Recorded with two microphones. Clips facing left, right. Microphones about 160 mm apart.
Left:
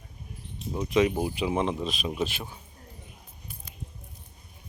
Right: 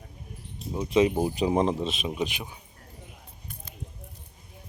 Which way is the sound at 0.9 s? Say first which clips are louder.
Right 2 dB; 30° right (ahead or behind).